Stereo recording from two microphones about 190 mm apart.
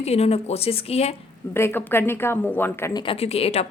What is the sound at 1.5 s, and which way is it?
A woman's voice, 10° left (ahead or behind).